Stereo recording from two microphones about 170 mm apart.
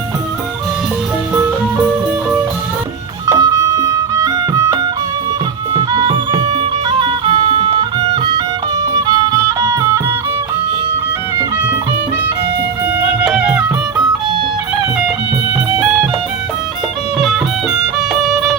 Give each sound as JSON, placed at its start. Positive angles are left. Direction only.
{"t": 3.2, "sound": "music", "side_deg": -20}
{"t": 13.0, "sound": "music", "side_deg": -5}
{"t": 17.2, "sound": "music", "side_deg": 0}